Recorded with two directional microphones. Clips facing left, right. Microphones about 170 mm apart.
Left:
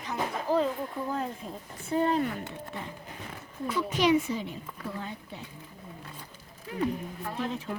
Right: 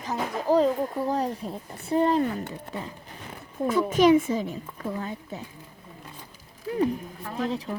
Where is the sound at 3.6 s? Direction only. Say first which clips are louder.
Right 7 dB; 45° right (ahead or behind).